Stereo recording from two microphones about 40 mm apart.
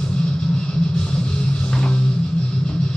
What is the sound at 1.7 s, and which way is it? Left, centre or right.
Music, left.